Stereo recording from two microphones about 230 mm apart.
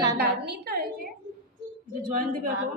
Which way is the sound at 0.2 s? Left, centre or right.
Right.